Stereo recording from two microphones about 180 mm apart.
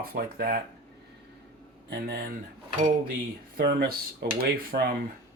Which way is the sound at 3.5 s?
60° right (ahead or behind).